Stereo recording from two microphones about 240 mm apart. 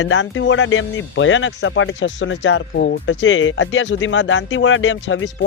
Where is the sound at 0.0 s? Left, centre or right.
Left.